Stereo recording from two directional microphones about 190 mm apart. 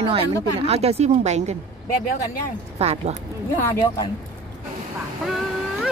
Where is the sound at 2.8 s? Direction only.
35° right (ahead or behind).